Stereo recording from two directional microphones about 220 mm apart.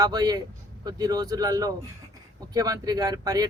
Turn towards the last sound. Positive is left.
turn(degrees=-15)  # may be behind; listen again after turning